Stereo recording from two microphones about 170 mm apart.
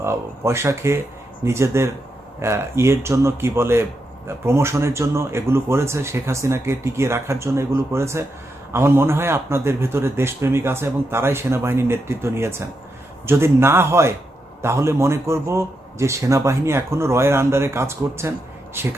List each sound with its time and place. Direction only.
0.0 s a man's voice: 15° right (ahead or behind)